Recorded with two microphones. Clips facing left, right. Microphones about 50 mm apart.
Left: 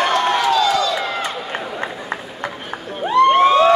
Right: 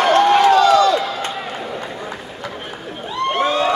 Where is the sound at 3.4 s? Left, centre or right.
Centre.